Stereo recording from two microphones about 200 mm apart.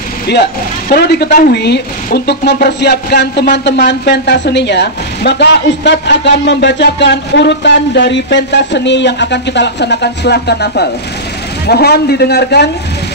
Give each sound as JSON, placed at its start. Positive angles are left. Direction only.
{"t": 0.3, "sound": "speech", "side_deg": 55}